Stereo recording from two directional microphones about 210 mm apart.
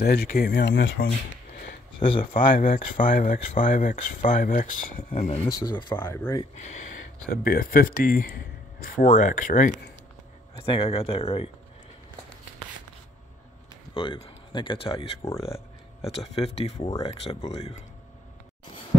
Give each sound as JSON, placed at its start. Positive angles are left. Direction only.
{"t": 0.0, "sound": "speech", "side_deg": 45}
{"t": 2.0, "sound": "speech", "side_deg": 25}
{"t": 2.3, "sound": "speech", "side_deg": 40}
{"t": 5.5, "sound": "speech", "side_deg": 20}
{"t": 7.2, "sound": "speech", "side_deg": 45}
{"t": 10.6, "sound": "speech", "side_deg": 25}
{"t": 13.9, "sound": "speech", "side_deg": 25}